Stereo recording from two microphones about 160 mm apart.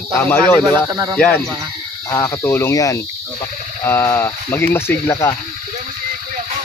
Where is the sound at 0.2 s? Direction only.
10° left (ahead or behind).